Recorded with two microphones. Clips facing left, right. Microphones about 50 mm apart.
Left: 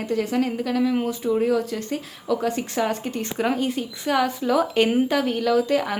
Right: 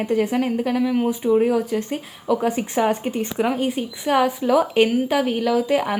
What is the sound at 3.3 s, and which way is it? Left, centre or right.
Speech, centre.